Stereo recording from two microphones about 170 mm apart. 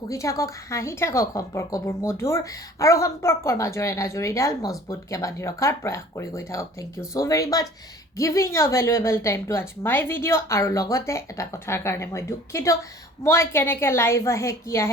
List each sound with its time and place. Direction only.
0.1 s a woman's voice: 20° left (ahead or behind)